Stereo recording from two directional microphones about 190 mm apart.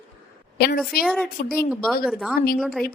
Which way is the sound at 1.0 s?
Centre (ahead or behind).